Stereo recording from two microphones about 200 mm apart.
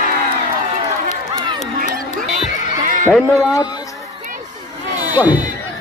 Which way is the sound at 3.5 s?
20° left (ahead or behind).